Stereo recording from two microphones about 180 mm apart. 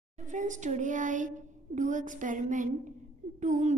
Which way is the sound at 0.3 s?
45° right (ahead or behind).